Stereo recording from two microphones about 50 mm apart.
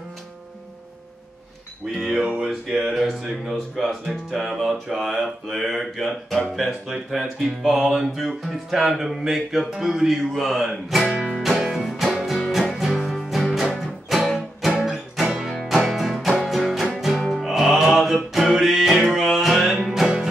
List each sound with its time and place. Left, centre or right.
2.0 s speech: centre
2.4 s music: centre
3.7 s speech: centre
7.1 s speech: centre
11.4 s music: centre